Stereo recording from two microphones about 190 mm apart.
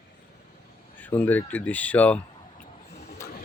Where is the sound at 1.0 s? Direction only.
10° left (ahead or behind).